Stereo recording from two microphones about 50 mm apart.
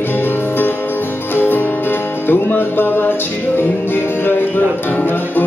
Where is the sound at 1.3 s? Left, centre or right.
Left.